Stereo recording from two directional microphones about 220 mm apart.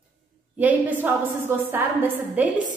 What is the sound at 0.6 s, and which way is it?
A woman's voice, 5° right (ahead or behind).